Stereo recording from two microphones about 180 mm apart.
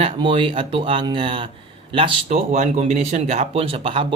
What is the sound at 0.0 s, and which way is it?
Speech, 30° right (ahead or behind).